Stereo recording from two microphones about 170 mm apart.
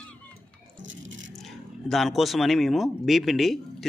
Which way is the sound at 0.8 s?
90° right.